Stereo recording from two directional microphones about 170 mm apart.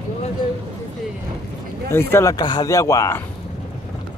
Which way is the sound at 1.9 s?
15° left (ahead or behind).